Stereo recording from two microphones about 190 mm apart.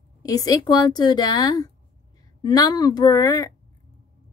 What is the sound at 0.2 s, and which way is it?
A woman's voice, 20° left (ahead or behind).